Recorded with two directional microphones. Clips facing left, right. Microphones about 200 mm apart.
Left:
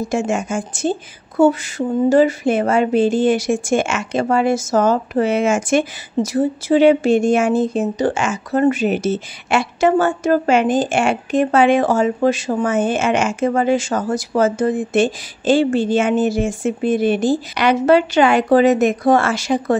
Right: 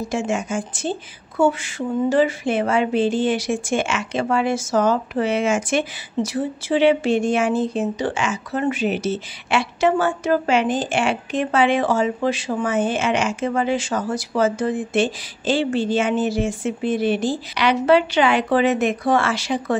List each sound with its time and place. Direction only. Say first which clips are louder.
0.1 s speech: left 2 dB; 50° left (ahead or behind)